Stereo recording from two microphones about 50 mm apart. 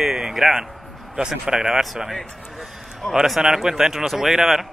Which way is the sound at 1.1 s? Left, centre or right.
Centre.